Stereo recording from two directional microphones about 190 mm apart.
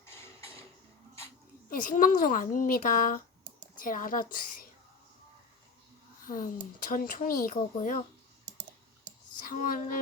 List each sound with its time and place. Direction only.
0.0 s a sound: 15° left (ahead or behind)
1.7 s a woman's voice: 45° left (ahead or behind)
6.2 s a woman's voice: 45° left (ahead or behind)
9.4 s speech: 45° left (ahead or behind)